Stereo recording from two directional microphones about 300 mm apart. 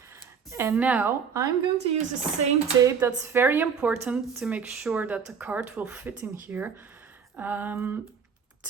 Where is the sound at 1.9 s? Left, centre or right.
Right.